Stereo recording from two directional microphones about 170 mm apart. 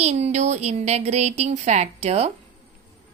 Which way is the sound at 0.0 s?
40° right (ahead or behind).